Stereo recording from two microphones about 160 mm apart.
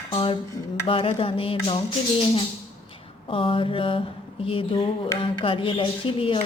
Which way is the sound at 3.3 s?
35° left (ahead or behind).